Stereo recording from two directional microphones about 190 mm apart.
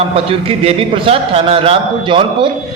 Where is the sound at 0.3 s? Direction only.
30° right (ahead or behind).